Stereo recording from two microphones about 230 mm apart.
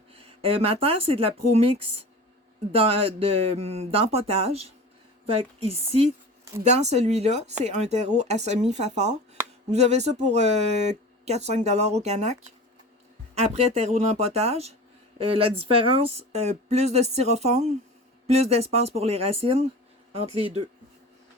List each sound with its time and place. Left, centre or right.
0.1 s speech: right
13.3 s speech: right